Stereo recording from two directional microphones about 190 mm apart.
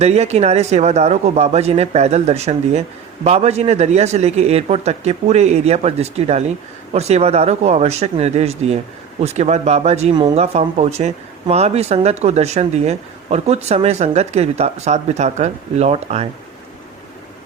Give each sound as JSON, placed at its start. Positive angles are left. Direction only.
{"t": 0.0, "sound": "speech", "side_deg": -35}